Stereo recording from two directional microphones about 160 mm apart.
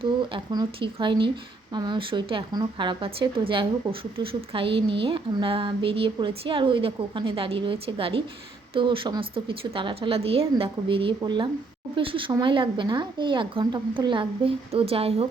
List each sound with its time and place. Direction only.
0.0 s speech: 30° right (ahead or behind)